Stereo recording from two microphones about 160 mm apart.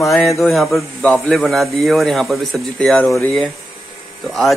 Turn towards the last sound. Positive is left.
turn(degrees=0)  # may be behind; listen again after turning